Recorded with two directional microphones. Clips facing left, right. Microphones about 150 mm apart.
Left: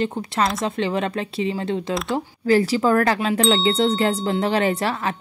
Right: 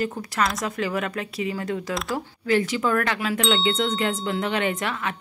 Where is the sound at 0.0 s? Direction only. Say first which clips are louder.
Left 3 dB; 25° left (ahead or behind).